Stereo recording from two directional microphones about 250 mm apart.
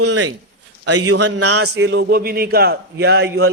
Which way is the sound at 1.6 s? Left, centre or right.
Right.